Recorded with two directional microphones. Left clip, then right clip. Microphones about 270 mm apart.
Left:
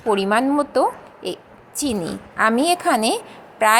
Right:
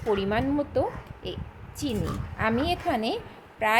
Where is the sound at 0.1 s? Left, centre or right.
Centre.